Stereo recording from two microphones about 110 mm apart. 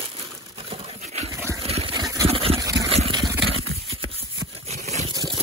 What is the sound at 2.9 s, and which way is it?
Vehicle, 65° right (ahead or behind).